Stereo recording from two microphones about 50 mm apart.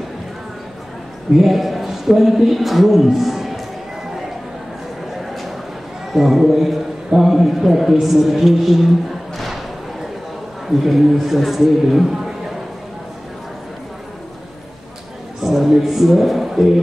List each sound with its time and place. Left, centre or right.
1.4 s speech: centre
5.2 s a sound: centre
6.1 s a man's voice: centre
10.7 s a man's voice: centre
15.4 s a woman's voice: centre